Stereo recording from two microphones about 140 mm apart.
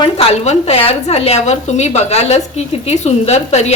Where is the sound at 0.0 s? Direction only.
45° left (ahead or behind).